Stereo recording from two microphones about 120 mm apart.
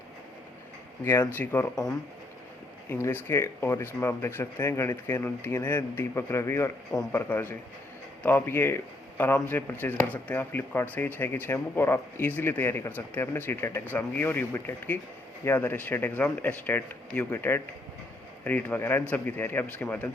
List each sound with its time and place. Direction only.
1.0 s speech: 25° left (ahead or behind)
1.5 s speech: 10° left (ahead or behind)
2.9 s speech: 20° left (ahead or behind)